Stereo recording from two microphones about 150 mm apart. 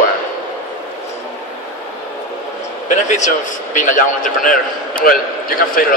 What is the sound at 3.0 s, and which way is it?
A man's voice, 50° left (ahead or behind).